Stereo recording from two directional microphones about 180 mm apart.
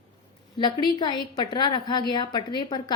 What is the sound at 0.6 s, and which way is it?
A woman's voice, 25° left (ahead or behind).